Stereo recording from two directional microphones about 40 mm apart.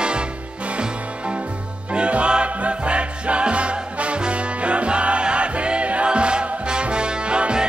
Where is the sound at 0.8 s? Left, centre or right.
Right.